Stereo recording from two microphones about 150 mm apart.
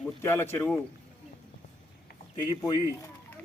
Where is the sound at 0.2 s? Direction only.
15° left (ahead or behind).